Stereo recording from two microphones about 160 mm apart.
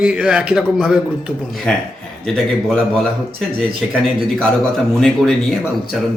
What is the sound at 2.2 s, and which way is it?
Speech, 5° left (ahead or behind).